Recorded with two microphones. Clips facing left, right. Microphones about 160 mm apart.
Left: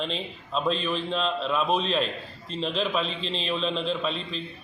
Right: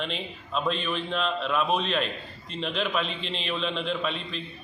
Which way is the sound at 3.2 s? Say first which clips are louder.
Left 3 dB; 35° left (ahead or behind).